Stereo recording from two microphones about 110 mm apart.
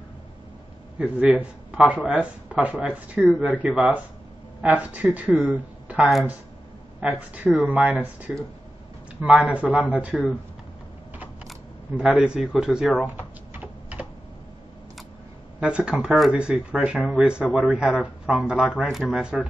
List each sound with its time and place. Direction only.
0.9 s a man's voice: 10° right (ahead or behind)
9.3 s speech: 10° right (ahead or behind)
12.0 s speech: 10° right (ahead or behind)
13.5 s typing: 15° right (ahead or behind)
15.6 s speech: 10° right (ahead or behind)